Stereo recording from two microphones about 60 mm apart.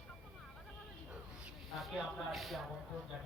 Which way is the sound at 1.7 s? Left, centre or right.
Centre.